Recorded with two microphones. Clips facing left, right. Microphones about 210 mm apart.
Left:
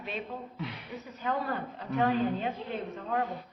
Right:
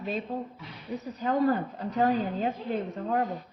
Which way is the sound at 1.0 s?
35° right (ahead or behind).